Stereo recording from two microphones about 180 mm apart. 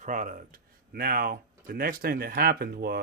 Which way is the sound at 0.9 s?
55° right (ahead or behind).